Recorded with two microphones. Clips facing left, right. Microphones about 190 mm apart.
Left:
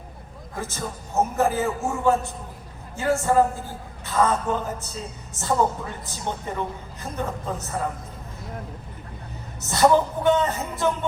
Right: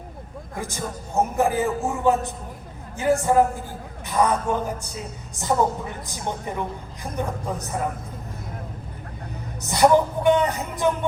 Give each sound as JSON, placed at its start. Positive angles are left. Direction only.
{"t": 0.6, "sound": "a woman's voice", "side_deg": -15}
{"t": 9.6, "sound": "speech", "side_deg": -15}